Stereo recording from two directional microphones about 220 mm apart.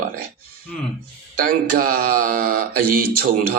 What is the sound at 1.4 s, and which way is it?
Speech, 40° right (ahead or behind).